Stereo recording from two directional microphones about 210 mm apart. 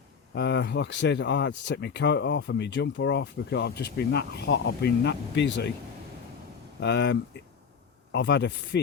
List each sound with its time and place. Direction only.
0.3 s speech: 55° left (ahead or behind)
6.7 s speech: 55° left (ahead or behind)